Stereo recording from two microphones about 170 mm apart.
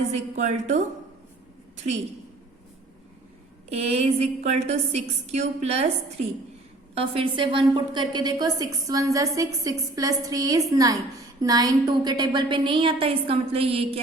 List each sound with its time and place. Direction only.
0.1 s a woman's voice: 45° right (ahead or behind)
3.8 s a woman's voice: 40° right (ahead or behind)
6.9 s a woman's voice: 35° right (ahead or behind)